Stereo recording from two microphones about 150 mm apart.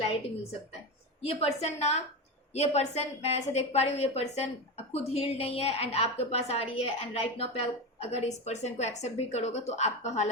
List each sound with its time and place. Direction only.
1.2 s a woman's voice: 40° left (ahead or behind)